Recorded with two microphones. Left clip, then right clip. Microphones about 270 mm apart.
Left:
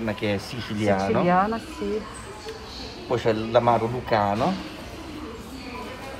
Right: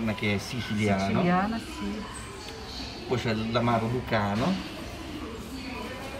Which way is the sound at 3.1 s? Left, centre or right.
Centre.